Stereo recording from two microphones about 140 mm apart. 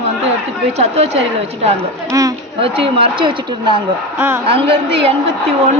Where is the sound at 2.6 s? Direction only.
40° right (ahead or behind).